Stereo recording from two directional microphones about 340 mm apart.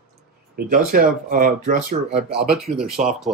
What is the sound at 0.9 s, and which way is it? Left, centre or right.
Speech, right.